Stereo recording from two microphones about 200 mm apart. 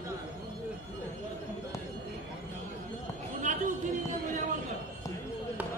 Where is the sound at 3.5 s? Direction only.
40° right (ahead or behind).